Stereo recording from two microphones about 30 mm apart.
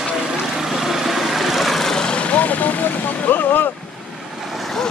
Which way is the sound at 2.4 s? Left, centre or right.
Left.